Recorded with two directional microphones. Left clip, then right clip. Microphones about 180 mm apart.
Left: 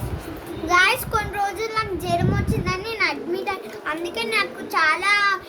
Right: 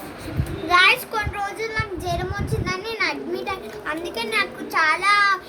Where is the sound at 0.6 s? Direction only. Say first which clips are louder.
Right 2 dB; 20° left (ahead or behind).